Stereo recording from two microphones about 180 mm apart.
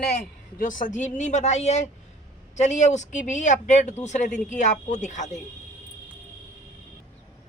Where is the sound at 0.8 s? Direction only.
45° left (ahead or behind).